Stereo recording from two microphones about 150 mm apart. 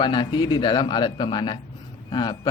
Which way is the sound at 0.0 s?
30° left (ahead or behind).